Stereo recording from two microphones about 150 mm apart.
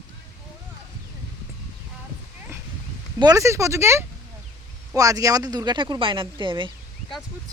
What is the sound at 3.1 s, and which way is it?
Speech, 25° right (ahead or behind).